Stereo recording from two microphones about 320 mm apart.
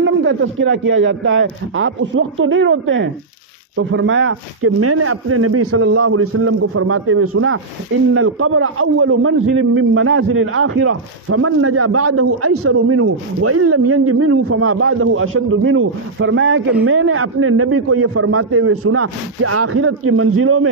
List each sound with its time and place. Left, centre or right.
0.0 s a man's voice: right